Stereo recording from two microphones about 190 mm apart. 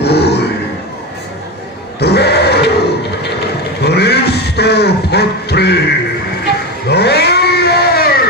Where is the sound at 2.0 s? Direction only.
60° left (ahead or behind).